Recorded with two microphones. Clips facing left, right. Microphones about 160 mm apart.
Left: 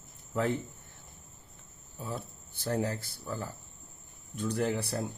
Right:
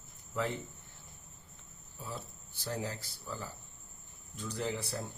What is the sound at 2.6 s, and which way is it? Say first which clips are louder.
Speech: left 7 dB; 55° left (ahead or behind).